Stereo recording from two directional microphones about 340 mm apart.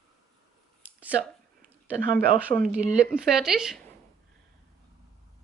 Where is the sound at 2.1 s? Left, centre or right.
Right.